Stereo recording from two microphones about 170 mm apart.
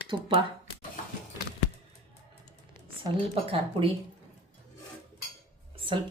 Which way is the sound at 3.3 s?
35° right (ahead or behind).